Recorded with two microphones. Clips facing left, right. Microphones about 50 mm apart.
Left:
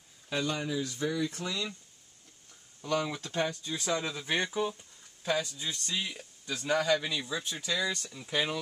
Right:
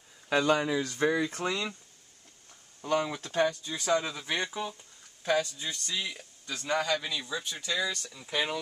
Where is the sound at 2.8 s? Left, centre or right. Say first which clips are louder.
Right 2 dB; centre.